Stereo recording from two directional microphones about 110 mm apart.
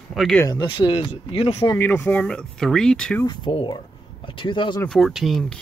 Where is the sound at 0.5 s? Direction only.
45° left (ahead or behind).